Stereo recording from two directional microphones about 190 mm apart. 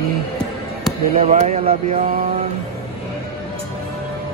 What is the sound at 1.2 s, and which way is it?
Speech, 35° right (ahead or behind).